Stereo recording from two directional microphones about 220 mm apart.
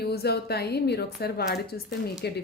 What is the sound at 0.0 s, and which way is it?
A woman's voice, 45° left (ahead or behind).